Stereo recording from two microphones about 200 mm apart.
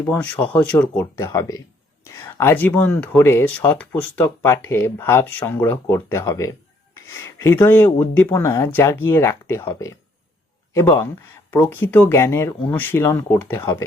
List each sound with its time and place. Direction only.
0.0 s speech: 10° left (ahead or behind)